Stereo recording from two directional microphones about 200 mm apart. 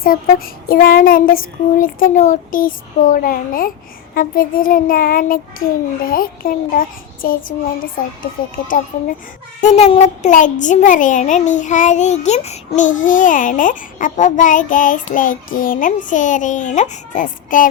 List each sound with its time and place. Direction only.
0.0 s child singing: 45° left (ahead or behind)
9.6 s a child's voice: 30° left (ahead or behind)